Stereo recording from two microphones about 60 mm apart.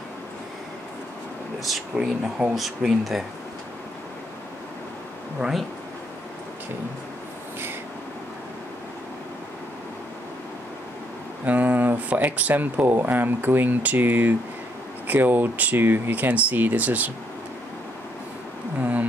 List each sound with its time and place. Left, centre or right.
2.5 s speech: centre
5.4 s speech: right
11.4 s speech: right
18.8 s a sound: right